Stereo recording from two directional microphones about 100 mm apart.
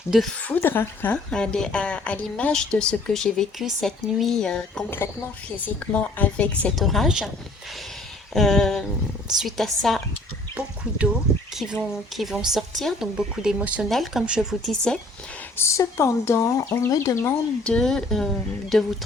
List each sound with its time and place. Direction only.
0.4 s a woman's voice: 20° left (ahead or behind)
6.7 s speech: centre (ahead or behind)
8.3 s speech: 5° left (ahead or behind)
11.5 s speech: 5° right (ahead or behind)
13.8 s speech: centre (ahead or behind)
15.5 s speech: 30° left (ahead or behind)
17.6 s a woman's voice: 10° left (ahead or behind)